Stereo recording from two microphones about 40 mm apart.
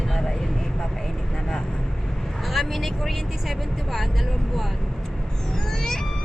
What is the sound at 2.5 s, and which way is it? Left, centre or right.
Speech, centre.